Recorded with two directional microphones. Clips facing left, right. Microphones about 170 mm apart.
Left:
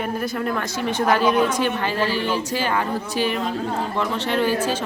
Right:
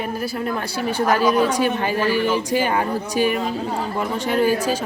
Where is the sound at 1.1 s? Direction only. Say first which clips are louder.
Right 1 dB; 10° right (ahead or behind).